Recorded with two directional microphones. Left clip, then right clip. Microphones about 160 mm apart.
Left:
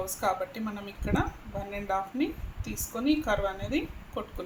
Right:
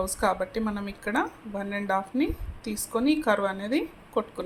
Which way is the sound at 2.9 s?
55° right (ahead or behind).